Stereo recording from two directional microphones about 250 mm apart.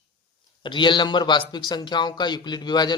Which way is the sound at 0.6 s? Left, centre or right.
Centre.